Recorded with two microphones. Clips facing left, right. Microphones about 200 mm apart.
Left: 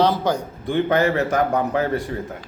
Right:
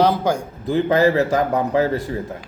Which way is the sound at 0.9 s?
25° right (ahead or behind).